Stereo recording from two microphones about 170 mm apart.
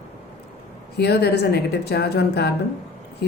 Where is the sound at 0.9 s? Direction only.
75° left (ahead or behind).